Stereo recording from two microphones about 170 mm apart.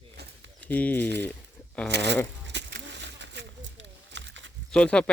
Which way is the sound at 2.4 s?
90° right.